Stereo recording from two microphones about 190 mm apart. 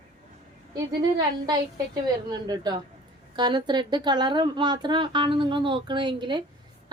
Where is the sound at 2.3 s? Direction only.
20° right (ahead or behind).